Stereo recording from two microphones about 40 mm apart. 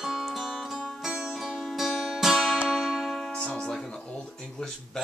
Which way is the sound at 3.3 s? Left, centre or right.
Left.